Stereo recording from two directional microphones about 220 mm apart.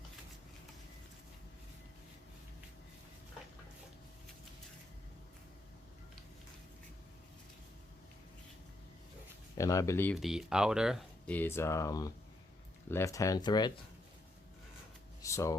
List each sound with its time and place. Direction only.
9.6 s speech: 15° left (ahead or behind)
10.2 s speech: centre (ahead or behind); by 13.7 s 20° left (ahead or behind)
15.2 s speech: 15° left (ahead or behind)